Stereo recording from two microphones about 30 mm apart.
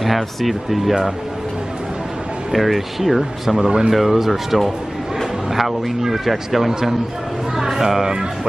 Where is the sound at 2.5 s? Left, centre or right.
Centre.